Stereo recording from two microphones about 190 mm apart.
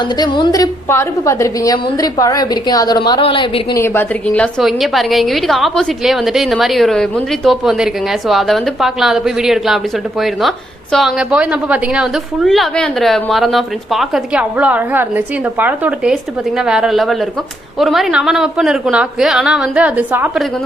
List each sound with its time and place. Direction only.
0.2 s a woman's voice: 20° left (ahead or behind)
3.8 s a woman's voice: 10° left (ahead or behind); by 20.3 s 10° right (ahead or behind)